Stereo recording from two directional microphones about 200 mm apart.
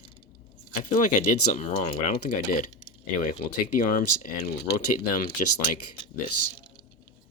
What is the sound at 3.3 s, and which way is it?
Speech, 40° left (ahead or behind).